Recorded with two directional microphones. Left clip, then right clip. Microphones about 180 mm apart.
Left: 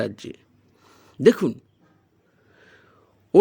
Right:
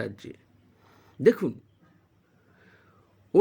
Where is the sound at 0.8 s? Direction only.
25° left (ahead or behind).